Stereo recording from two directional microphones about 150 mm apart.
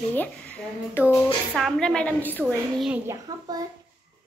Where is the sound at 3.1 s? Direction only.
25° right (ahead or behind).